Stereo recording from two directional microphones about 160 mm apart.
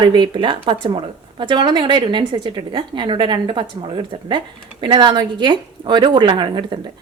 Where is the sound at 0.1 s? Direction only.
30° right (ahead or behind).